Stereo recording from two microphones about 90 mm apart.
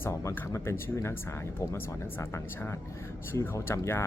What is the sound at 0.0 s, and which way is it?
Speech, 30° left (ahead or behind).